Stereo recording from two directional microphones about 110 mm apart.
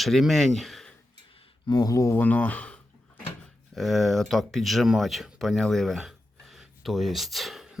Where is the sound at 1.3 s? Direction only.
55° left (ahead or behind); by 2.1 s 30° left (ahead or behind).